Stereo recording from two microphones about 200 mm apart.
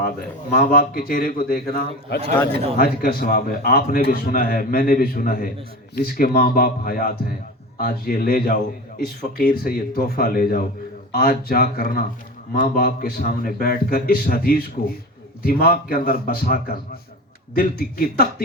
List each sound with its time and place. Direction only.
0.5 s a man's voice: 50° left (ahead or behind)